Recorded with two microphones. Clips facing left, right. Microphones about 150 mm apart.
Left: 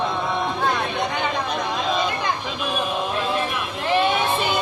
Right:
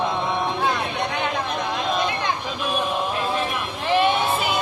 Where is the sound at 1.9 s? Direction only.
Centre (ahead or behind).